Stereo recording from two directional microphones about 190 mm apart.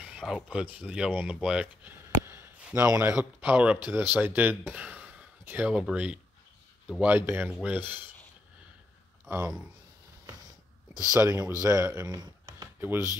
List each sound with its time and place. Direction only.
0.0 s speech: centre (ahead or behind)
9.2 s speech: 10° right (ahead or behind)
11.1 s speech: 15° right (ahead or behind)